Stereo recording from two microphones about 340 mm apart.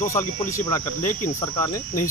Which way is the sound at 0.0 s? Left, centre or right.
Centre.